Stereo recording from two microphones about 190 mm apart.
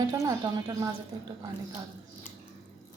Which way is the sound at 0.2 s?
20° right (ahead or behind).